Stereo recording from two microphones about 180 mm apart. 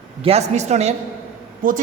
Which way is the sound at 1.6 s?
50° right (ahead or behind).